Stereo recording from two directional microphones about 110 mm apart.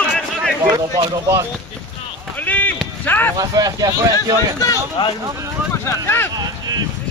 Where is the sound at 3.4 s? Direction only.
35° right (ahead or behind).